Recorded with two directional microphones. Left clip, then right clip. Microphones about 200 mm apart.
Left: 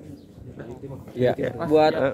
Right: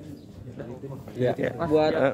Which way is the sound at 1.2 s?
50° left (ahead or behind).